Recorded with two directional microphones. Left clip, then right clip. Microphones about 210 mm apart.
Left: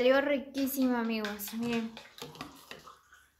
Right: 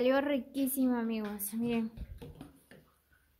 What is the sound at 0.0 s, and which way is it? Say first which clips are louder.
Speech: left 3 dB; 20° right (ahead or behind).